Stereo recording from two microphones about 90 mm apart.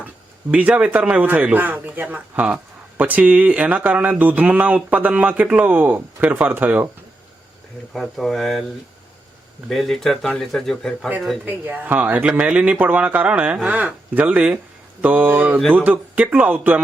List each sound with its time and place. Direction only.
0.5 s speech: 15° right (ahead or behind)
8.0 s speech: centre (ahead or behind)
9.6 s speech: 5° left (ahead or behind)
11.4 s speech: 20° right (ahead or behind)
15.0 s mantra: 20° right (ahead or behind)
15.7 s speech: 20° right (ahead or behind)